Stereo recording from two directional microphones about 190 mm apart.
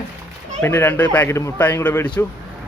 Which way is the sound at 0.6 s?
10° left (ahead or behind).